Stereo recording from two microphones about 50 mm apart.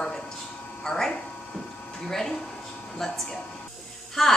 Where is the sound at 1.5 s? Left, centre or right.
Centre.